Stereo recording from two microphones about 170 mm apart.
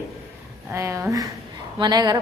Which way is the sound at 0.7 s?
15° right (ahead or behind).